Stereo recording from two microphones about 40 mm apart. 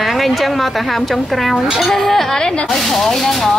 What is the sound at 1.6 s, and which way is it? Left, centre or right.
Speech, centre.